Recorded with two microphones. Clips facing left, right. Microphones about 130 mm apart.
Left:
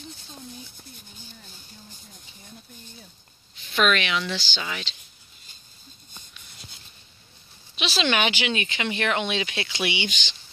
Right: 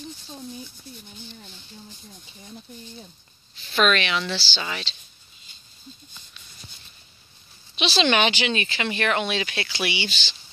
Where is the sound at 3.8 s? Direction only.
10° left (ahead or behind).